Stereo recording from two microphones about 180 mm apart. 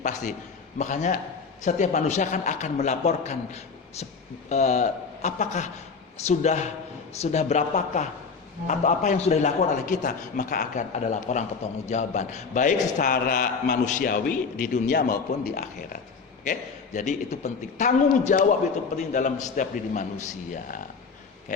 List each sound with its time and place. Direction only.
0.0 s a man's voice: 40° left (ahead or behind); by 15.6 s 55° left (ahead or behind)
16.4 s a man's voice: 45° left (ahead or behind)